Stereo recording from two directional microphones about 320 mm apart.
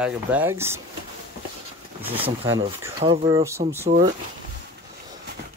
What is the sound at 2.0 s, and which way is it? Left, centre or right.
Speech, centre.